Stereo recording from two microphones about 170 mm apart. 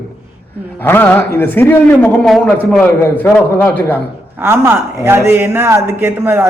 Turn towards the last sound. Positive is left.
turn(degrees=-15)  # may be behind; listen again after turning